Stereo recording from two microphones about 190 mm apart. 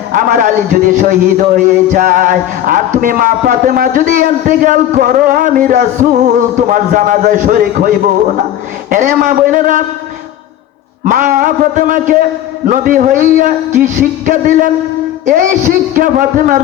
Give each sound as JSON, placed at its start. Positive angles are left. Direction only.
{"t": 0.1, "sound": "a man's voice", "side_deg": -45}
{"t": 11.0, "sound": "a man's voice", "side_deg": -45}